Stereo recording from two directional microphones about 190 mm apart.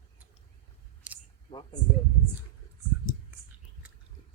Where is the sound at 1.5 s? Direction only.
25° left (ahead or behind).